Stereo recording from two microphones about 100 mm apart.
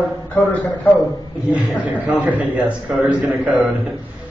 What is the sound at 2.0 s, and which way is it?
Speech, 15° right (ahead or behind).